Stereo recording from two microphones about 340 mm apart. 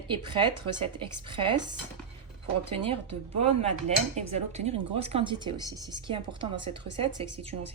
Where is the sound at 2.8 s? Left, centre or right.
Centre.